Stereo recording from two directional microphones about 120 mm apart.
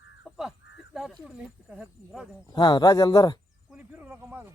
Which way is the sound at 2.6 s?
40° left (ahead or behind).